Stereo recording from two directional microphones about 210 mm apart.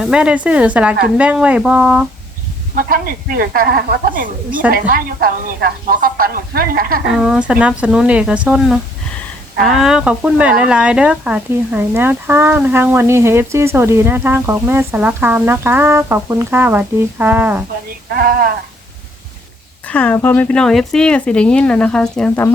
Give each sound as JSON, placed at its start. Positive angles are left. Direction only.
{"t": 0.0, "sound": "speech", "side_deg": -5}
{"t": 2.7, "sound": "a woman's voice", "side_deg": -45}
{"t": 7.2, "sound": "speech", "side_deg": -5}
{"t": 18.1, "sound": "a woman's voice", "side_deg": -45}
{"t": 19.9, "sound": "speech", "side_deg": 5}